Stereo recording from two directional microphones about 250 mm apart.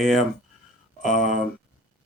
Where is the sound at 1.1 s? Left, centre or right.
Left.